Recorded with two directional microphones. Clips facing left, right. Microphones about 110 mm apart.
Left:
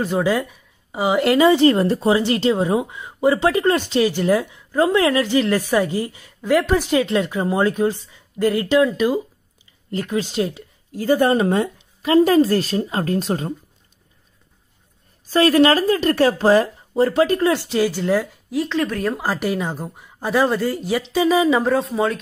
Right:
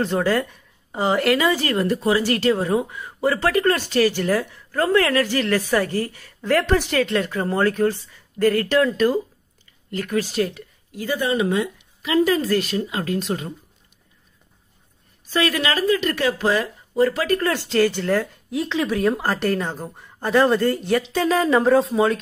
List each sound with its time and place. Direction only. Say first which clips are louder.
0.0 s speech: left 1 dB; 10° left (ahead or behind)
1.2 s a woman's voice: left 6 dB; 25° left (ahead or behind)
9.8 s speech: left 1 dB; 25° left (ahead or behind)
10.9 s speech: left 7 dB; 40° left (ahead or behind)
15.2 s speech: left 8 dB; 35° left (ahead or behind)
17.4 s a woman's voice: left 1 dB; 15° left (ahead or behind)
18.5 s a woman's voice: left 1 dB; centre (ahead or behind)